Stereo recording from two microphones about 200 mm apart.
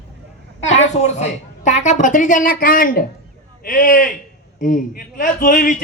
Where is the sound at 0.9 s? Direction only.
35° left (ahead or behind).